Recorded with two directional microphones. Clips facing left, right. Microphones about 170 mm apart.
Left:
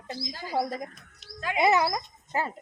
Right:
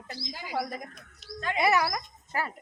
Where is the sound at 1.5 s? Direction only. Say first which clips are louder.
Left 3 dB; 20° left (ahead or behind).